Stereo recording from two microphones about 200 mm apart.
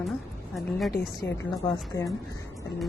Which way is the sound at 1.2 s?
10° left (ahead or behind).